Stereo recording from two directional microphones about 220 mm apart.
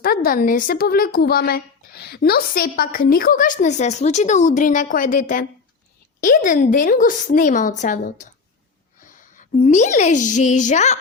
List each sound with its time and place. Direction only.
0.0 s a woman's voice: 45° left (ahead or behind)
9.4 s a woman's voice: 35° left (ahead or behind)